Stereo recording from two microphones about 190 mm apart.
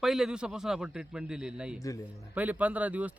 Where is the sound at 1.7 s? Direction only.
20° left (ahead or behind).